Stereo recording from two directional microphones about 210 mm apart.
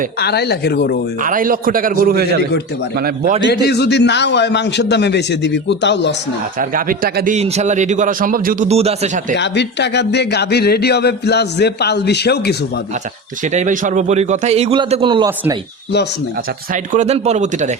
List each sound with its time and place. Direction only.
0.2 s a man's voice: 50° left (ahead or behind)
1.2 s a man's voice: 40° right (ahead or behind)
3.5 s a man's voice: 50° left (ahead or behind)
6.6 s a man's voice: 40° right (ahead or behind)
9.3 s a man's voice: 55° left (ahead or behind)
13.5 s a man's voice: 35° right (ahead or behind)
16.9 s a man's voice: 35° right (ahead or behind)